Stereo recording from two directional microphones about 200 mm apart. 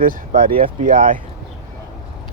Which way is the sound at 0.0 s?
45° right (ahead or behind).